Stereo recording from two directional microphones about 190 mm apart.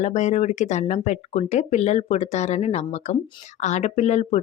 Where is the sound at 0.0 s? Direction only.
40° left (ahead or behind).